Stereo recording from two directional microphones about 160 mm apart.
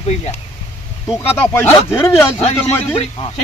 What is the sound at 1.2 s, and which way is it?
Speech, 15° left (ahead or behind).